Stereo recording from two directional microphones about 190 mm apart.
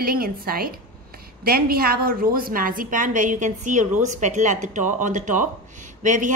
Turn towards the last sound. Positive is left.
turn(degrees=-40)  # may be behind; listen again after turning